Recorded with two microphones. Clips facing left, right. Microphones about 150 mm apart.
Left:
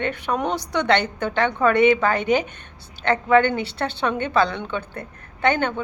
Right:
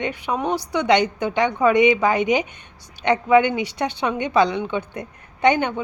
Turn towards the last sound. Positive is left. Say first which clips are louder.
# right 3 dB
turn(degrees=-15)  # may be behind; listen again after turning